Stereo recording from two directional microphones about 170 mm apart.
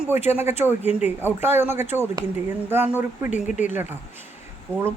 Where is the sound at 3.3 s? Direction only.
45° left (ahead or behind).